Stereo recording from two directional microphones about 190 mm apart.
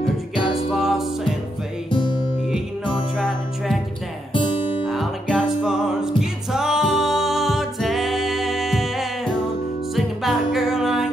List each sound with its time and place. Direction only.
0.7 s music: centre (ahead or behind)
1.9 s music: 25° left (ahead or behind)
3.2 s music: centre (ahead or behind)
4.3 s music: 25° left (ahead or behind)
4.8 s music: centre (ahead or behind)